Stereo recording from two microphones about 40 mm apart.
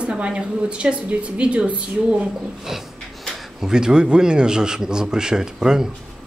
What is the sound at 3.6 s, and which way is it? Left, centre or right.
Speech, centre.